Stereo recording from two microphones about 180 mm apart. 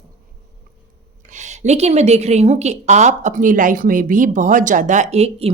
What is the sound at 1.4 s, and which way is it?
A woman's voice, 40° right (ahead or behind).